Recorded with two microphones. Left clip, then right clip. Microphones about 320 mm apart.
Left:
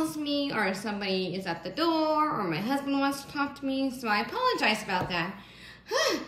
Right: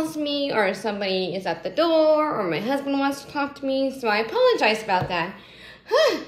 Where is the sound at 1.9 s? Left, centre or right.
Centre.